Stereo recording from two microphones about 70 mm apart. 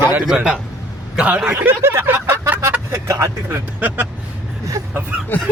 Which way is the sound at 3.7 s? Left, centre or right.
Right.